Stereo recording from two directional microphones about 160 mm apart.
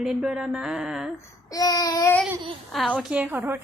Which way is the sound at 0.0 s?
5° right (ahead or behind).